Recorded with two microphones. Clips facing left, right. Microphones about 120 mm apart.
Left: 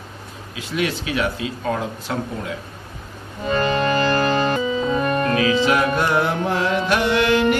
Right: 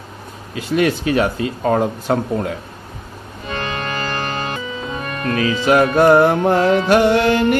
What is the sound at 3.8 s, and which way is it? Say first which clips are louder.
Music: left 6 dB; 40° left (ahead or behind).